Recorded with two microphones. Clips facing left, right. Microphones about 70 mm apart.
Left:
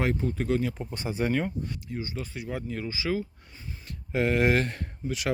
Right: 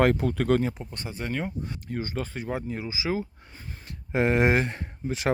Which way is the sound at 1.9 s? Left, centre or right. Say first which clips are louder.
Right 3 dB; right.